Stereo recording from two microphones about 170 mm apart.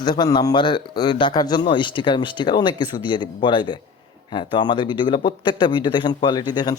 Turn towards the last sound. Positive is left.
turn(degrees=25)  # may be behind; listen again after turning